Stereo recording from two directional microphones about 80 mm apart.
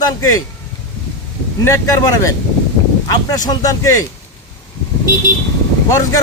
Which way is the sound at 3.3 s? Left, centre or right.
Left.